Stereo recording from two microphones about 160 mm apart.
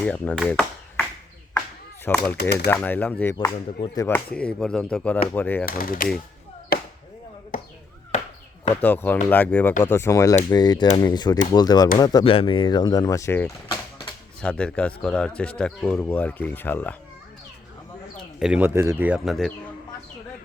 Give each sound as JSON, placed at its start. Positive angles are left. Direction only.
{"t": 0.0, "sound": "speech", "side_deg": 10}
{"t": 2.0, "sound": "speech", "side_deg": 10}
{"t": 2.4, "sound": "speech", "side_deg": 90}
{"t": 2.7, "sound": "speech", "side_deg": 10}
{"t": 5.6, "sound": "speech", "side_deg": 65}
{"t": 6.7, "sound": "chop", "side_deg": 70}
{"t": 8.7, "sound": "speech", "side_deg": 10}
{"t": 12.2, "sound": "speech", "side_deg": 35}
{"t": 18.3, "sound": "speech", "side_deg": -5}